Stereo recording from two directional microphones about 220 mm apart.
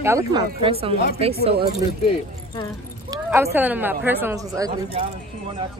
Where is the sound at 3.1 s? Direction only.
10° right (ahead or behind).